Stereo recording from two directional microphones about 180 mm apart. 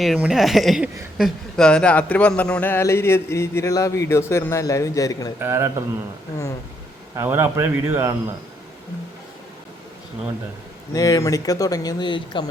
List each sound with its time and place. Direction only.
0.0 s speech: centre (ahead or behind); by 5.3 s 20° left (ahead or behind)
5.4 s a man's voice: 15° right (ahead or behind)
7.2 s a man's voice: 15° right (ahead or behind)
10.9 s speech: 20° left (ahead or behind)